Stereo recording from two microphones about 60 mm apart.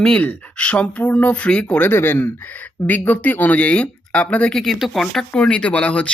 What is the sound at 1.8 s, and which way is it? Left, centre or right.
Speech, left.